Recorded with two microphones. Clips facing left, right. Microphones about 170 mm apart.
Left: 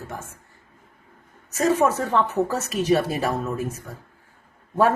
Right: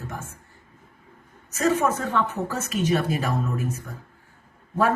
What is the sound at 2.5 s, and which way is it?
Speech, 35° left (ahead or behind).